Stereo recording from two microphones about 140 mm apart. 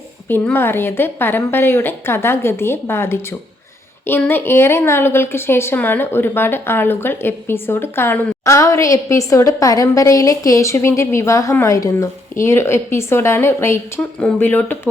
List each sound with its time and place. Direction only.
0.3 s a woman's voice: 15° left (ahead or behind)